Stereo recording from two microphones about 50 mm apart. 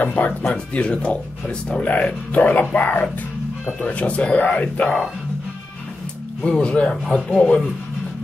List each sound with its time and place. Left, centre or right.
0.0 s speech: left
6.4 s speech: left
6.9 s speech: centre